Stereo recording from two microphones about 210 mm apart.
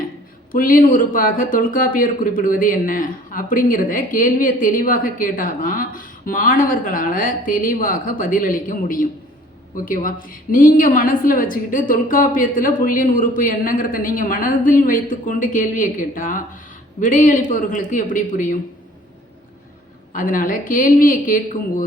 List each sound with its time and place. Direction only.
0.5 s speech: 40° left (ahead or behind)
20.1 s speech: 40° left (ahead or behind)